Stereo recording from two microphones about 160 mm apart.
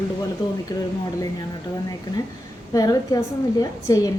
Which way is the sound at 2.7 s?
25° left (ahead or behind).